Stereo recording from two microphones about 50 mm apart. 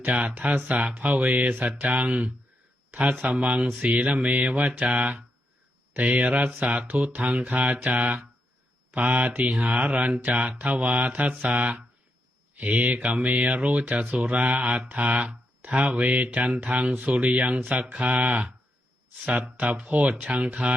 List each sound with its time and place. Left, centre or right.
0.0 s speech: right
0.3 s a sound: right
0.7 s speech: right
6.1 s speech: right